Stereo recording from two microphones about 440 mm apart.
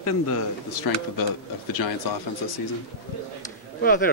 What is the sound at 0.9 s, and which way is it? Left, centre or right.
Speech, left.